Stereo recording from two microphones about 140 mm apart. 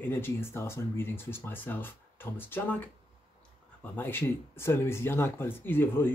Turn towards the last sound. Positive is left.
turn(degrees=15)  # may be behind; listen again after turning